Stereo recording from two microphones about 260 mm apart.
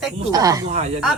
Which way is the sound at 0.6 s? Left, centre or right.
Right.